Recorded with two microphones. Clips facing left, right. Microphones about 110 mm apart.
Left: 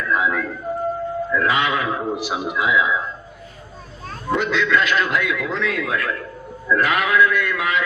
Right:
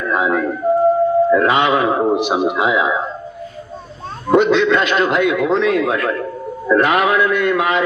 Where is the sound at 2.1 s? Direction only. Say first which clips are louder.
Right 8 dB; 20° right (ahead or behind).